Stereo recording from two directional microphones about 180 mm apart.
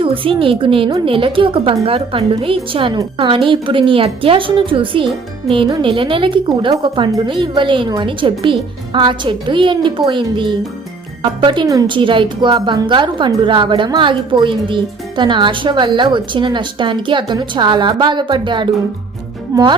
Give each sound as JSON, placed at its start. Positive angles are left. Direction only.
{"t": 0.0, "sound": "a woman's voice", "side_deg": -30}